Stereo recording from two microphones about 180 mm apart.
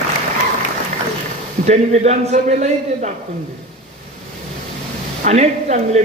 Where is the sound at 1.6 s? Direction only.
40° right (ahead or behind).